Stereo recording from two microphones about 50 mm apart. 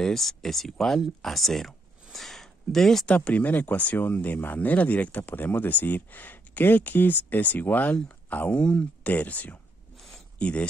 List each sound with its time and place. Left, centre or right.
0.0 s speech: centre
2.1 s a sound: centre
3.3 s speech: left
9.0 s speech: left